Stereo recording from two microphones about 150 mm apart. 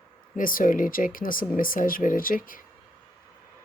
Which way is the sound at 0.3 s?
65° left (ahead or behind).